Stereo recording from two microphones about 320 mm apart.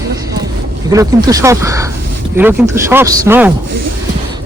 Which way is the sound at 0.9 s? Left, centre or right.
Centre.